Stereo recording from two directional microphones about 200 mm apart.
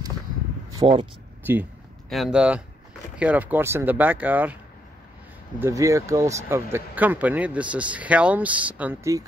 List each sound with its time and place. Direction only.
0.8 s speech: 25° right (ahead or behind)
1.4 s speech: 10° right (ahead or behind)
5.6 s speech: 15° right (ahead or behind)